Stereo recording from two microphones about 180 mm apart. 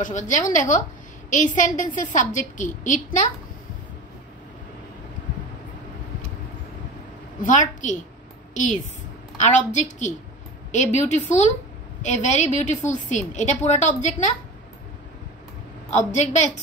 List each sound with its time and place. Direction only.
0.0 s a woman's voice: 45° left (ahead or behind)
7.4 s a woman's voice: 45° left (ahead or behind)
9.4 s a woman's voice: 40° left (ahead or behind)
15.9 s a woman's voice: 40° left (ahead or behind)